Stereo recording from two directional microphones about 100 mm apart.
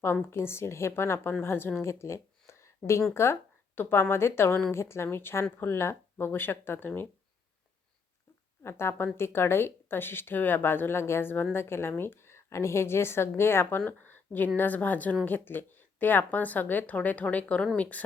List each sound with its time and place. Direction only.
0.0 s a woman's voice: 25° left (ahead or behind)
8.6 s a woman's voice: 25° left (ahead or behind)